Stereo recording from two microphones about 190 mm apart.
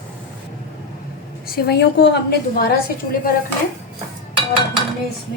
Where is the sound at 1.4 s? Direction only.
55° left (ahead or behind).